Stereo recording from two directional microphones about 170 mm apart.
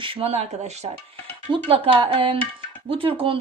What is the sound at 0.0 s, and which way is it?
Speech, 35° right (ahead or behind).